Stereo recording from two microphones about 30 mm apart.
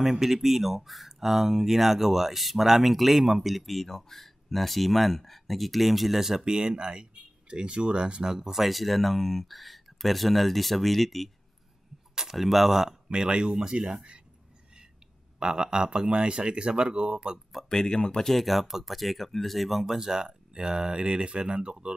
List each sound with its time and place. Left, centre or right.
0.0 s speech: centre
6.1 s speech: centre
6.4 s speech: right
8.4 s speech: centre
12.4 s speech: centre
13.1 s speech: right
15.4 s speech: right
17.6 s speech: left
18.3 s speech: centre
19.8 s speech: centre; by 21.9 s right